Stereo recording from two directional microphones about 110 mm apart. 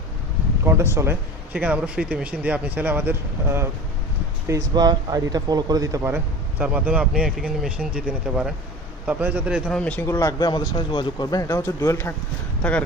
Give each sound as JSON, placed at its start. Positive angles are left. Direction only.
{"t": 0.6, "sound": "speech", "side_deg": -25}
{"t": 1.5, "sound": "a man's voice", "side_deg": -10}
{"t": 4.7, "sound": "a man's voice", "side_deg": -40}
{"t": 9.7, "sound": "speech", "side_deg": 10}
{"t": 10.1, "sound": "speech", "side_deg": 30}
{"t": 11.4, "sound": "speech", "side_deg": 25}